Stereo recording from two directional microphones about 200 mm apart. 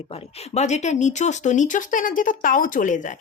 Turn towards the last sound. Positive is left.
turn(degrees=40)  # may be behind; listen again after turning